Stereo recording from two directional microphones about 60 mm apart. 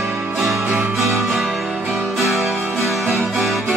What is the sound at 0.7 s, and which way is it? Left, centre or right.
Music, right.